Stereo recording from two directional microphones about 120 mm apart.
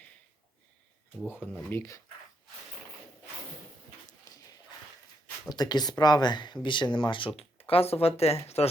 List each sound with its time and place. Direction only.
1.7 s speech: 25° left (ahead or behind)
4.3 s a sound: 30° left (ahead or behind)
5.5 s speech: 35° left (ahead or behind); by 8.6 s 60° left (ahead or behind)